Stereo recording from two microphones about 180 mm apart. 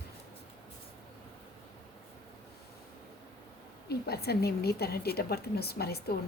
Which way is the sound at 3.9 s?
60° left (ahead or behind).